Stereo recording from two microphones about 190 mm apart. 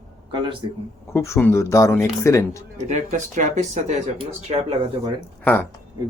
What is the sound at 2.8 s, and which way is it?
Speech, 40° right (ahead or behind).